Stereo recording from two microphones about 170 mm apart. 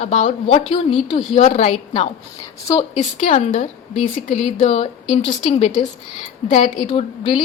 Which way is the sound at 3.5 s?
40° left (ahead or behind).